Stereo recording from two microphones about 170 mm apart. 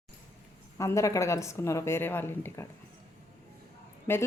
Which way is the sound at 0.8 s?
20° left (ahead or behind).